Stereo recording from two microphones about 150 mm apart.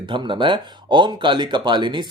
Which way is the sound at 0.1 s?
35° right (ahead or behind).